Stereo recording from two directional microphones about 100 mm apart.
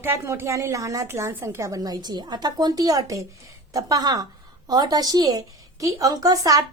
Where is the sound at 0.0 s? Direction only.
25° right (ahead or behind).